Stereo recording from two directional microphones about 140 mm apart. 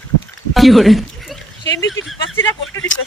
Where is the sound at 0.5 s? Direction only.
Centre (ahead or behind).